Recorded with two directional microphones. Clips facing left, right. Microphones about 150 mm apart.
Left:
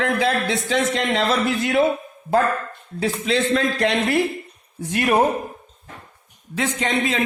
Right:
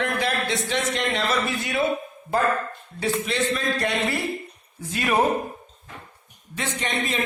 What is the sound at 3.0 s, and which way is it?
A man's voice, 90° left.